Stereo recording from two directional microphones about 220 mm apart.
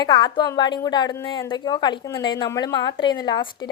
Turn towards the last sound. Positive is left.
turn(degrees=20)  # may be behind; listen again after turning